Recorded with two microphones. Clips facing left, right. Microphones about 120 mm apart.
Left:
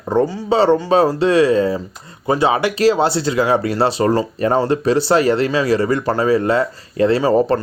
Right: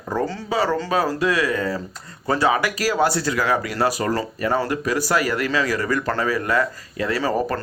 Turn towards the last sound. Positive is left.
turn(degrees=20)  # may be behind; listen again after turning